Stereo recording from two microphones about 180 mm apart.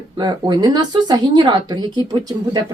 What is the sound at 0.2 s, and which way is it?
A woman's voice, 25° right (ahead or behind).